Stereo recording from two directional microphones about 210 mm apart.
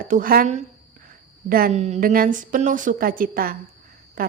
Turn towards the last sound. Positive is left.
turn(degrees=-45)  # may be behind; listen again after turning